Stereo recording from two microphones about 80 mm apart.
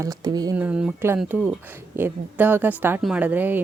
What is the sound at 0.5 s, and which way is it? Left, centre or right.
A woman's voice, right.